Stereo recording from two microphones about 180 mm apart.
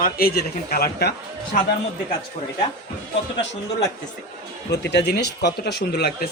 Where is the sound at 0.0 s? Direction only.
55° left (ahead or behind).